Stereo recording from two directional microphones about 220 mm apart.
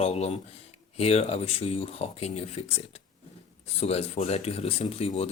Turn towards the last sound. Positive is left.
turn(degrees=25)  # may be behind; listen again after turning